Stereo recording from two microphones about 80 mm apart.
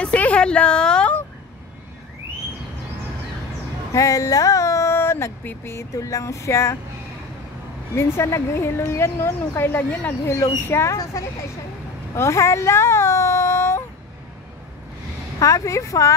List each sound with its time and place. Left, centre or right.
0.0 s a sound: centre
3.9 s speech: left
7.9 s speech: left
10.2 s speech: left
12.2 s a sound: left
15.3 s speech: left